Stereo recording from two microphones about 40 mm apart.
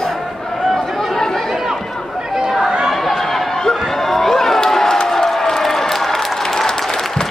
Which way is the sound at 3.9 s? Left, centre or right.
Centre.